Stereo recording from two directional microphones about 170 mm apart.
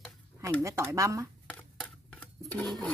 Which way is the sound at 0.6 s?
15° right (ahead or behind).